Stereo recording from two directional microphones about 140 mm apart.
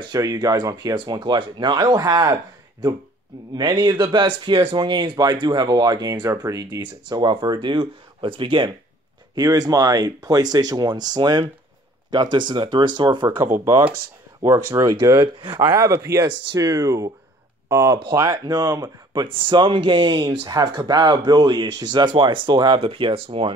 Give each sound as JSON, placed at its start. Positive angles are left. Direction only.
{"t": 0.0, "sound": "speech", "side_deg": -30}
{"t": 3.5, "sound": "speech", "side_deg": -30}
{"t": 13.7, "sound": "speech", "side_deg": -15}
{"t": 17.9, "sound": "speech", "side_deg": -30}